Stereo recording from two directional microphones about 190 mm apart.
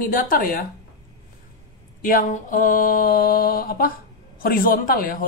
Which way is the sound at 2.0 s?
45° left (ahead or behind).